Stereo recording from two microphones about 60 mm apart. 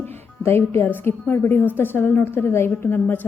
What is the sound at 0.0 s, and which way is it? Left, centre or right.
A woman's voice, left.